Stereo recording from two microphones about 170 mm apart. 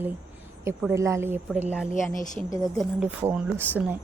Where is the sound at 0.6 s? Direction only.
10° right (ahead or behind).